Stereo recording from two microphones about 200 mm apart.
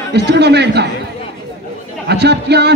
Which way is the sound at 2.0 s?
55° right (ahead or behind).